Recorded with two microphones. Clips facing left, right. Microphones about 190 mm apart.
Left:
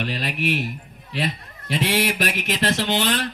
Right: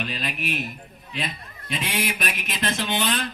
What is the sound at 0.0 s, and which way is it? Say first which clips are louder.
Speech: left 4 dB; 65° left (ahead or behind).